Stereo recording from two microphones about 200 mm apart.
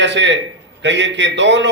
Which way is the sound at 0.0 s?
65° right (ahead or behind).